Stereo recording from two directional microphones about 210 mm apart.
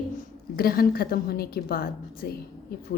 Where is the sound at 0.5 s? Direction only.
45° left (ahead or behind).